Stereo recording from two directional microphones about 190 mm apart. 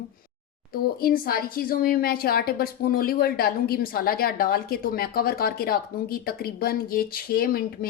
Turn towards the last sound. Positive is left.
turn(degrees=50)  # may be behind; listen again after turning